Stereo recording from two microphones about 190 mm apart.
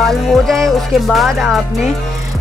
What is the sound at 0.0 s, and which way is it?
A woman's voice, centre (ahead or behind).